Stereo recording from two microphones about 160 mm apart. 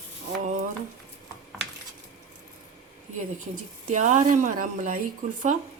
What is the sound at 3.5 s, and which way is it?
Speech, 50° right (ahead or behind).